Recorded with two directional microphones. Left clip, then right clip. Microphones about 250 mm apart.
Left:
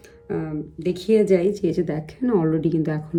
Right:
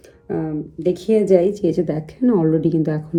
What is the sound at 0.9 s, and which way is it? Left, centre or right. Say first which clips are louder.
A woman's voice: right 3 dB; centre.